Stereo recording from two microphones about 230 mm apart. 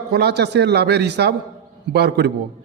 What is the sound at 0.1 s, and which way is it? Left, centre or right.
A man's voice, right.